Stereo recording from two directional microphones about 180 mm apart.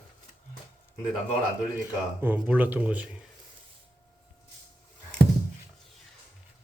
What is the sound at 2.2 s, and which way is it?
Speech, 10° right (ahead or behind).